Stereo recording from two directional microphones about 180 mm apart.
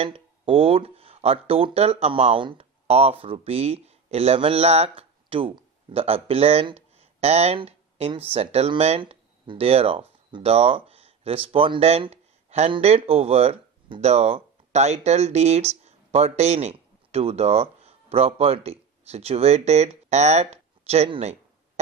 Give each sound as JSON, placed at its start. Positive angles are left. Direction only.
{"t": 0.0, "sound": "speech", "side_deg": -30}